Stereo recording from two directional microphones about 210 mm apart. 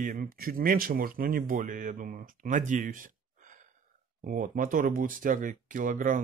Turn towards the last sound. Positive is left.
turn(degrees=-40)  # may be behind; listen again after turning